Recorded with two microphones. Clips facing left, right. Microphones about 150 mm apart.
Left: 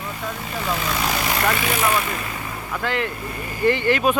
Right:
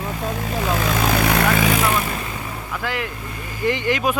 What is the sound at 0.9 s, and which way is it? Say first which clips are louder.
Vehicle: right 4 dB; 55° right (ahead or behind).